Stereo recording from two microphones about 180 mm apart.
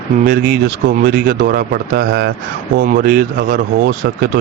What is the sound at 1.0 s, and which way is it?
Speech, 60° right (ahead or behind).